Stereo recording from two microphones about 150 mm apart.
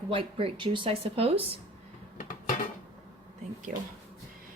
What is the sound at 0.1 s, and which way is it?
Speech, 35° right (ahead or behind).